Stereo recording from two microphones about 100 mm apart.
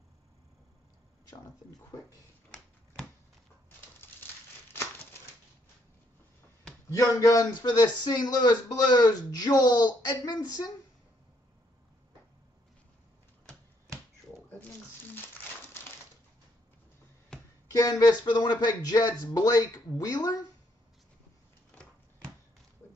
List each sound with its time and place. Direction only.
6.9 s a man's voice: 35° left (ahead or behind)
14.5 s a sound: 20° left (ahead or behind)
17.6 s a man's voice: 35° left (ahead or behind)